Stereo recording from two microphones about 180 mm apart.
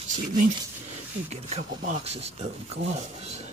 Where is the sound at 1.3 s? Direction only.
35° right (ahead or behind).